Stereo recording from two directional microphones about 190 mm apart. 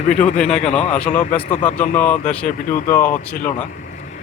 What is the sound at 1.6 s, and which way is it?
Speech, 10° left (ahead or behind).